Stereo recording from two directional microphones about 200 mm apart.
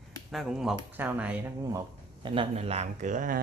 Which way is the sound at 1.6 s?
15° right (ahead or behind).